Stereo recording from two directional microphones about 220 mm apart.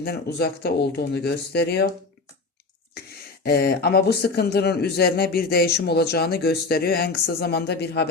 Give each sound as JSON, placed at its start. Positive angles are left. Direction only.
{"t": 0.0, "sound": "a man's voice", "side_deg": 45}
{"t": 3.4, "sound": "a man's voice", "side_deg": 45}